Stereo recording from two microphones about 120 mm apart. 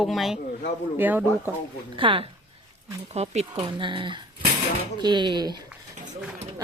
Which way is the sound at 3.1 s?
65° right (ahead or behind).